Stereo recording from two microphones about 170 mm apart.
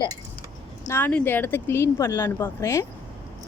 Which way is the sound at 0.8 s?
15° left (ahead or behind).